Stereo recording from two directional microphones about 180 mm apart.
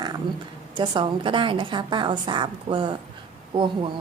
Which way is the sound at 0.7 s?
25° right (ahead or behind).